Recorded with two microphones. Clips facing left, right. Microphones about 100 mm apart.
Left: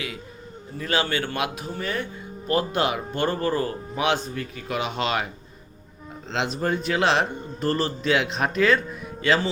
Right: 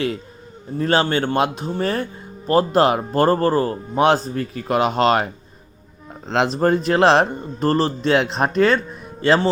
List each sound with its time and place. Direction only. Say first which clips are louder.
0.8 s speech: right 7 dB; 35° right (ahead or behind)
1.8 s speech: right 7 dB; 35° right (ahead or behind)